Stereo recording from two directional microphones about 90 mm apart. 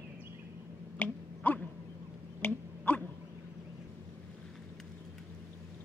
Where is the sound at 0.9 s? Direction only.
15° left (ahead or behind).